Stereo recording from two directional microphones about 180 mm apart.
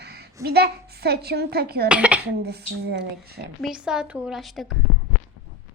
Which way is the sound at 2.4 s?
65° right (ahead or behind).